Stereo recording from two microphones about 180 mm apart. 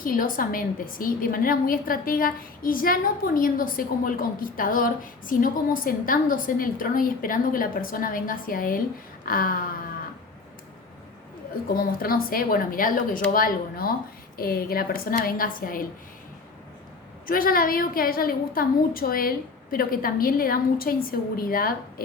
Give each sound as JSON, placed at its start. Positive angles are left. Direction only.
{"t": 0.0, "sound": "a woman's voice", "side_deg": 50}
{"t": 11.7, "sound": "a woman's voice", "side_deg": 55}
{"t": 17.2, "sound": "a woman's voice", "side_deg": 50}